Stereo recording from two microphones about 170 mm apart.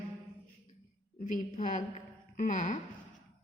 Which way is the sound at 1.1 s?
45° left (ahead or behind).